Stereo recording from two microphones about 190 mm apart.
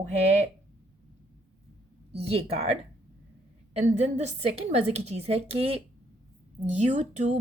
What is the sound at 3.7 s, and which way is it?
A woman's voice, 35° right (ahead or behind).